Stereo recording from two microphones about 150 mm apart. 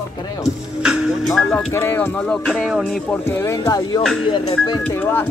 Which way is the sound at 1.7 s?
15° left (ahead or behind).